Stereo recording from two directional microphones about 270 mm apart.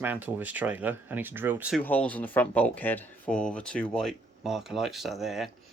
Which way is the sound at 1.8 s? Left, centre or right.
Centre.